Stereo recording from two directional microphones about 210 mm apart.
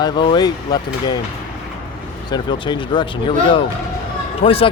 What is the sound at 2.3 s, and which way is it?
Speech, 20° left (ahead or behind).